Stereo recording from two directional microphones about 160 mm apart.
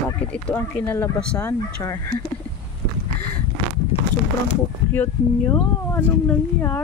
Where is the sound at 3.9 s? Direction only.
35° left (ahead or behind).